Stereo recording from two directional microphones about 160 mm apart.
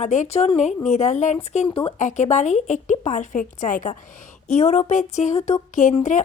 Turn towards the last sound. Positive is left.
turn(degrees=50)  # may be behind; listen again after turning